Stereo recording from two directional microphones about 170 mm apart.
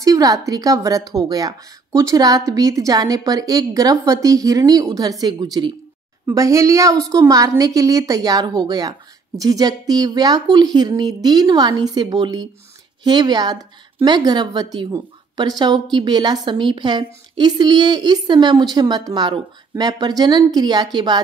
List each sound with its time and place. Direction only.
0.0 s a woman's voice: 20° right (ahead or behind)